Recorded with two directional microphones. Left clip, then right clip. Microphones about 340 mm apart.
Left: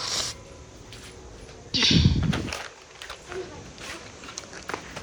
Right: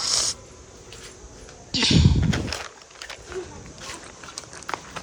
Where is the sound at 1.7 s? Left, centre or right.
Centre.